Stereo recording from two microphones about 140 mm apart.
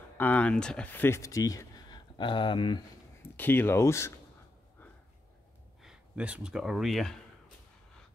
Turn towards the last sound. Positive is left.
turn(degrees=0)  # may be behind; listen again after turning